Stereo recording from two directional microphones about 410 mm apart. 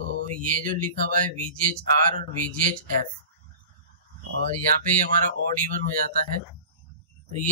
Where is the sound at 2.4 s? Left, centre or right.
Centre.